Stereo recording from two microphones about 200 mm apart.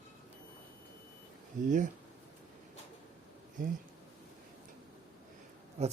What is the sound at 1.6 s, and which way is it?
Speech, 40° right (ahead or behind).